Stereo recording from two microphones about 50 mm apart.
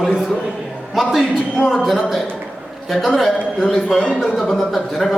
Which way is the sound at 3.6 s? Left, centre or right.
Centre.